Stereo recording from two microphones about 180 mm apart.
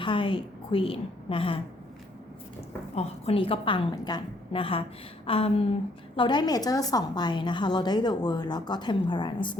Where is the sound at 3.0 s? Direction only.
30° left (ahead or behind).